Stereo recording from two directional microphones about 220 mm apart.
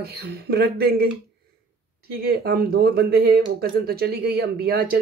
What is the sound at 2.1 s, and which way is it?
Speech, 45° right (ahead or behind).